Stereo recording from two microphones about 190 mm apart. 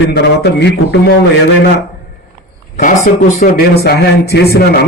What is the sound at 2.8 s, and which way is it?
Speech, 45° left (ahead or behind).